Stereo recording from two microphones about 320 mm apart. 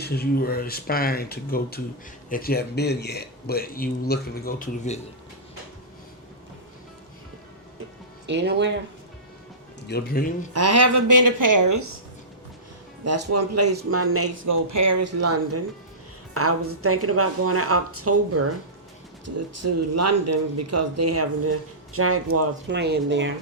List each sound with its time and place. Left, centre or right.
0.0 s a man's voice: left
8.3 s speech: right
9.8 s a man's voice: left
10.5 s a woman's voice: right
13.1 s speech: right
14.4 s a woman's voice: right
19.5 s speech: right